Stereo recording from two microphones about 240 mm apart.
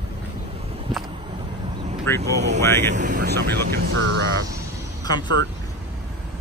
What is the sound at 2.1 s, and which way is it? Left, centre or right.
Speech, right.